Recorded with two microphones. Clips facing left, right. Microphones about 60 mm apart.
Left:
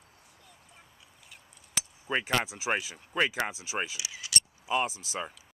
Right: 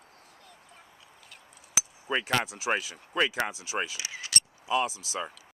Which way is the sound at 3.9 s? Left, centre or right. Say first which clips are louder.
Right 1 dB; right.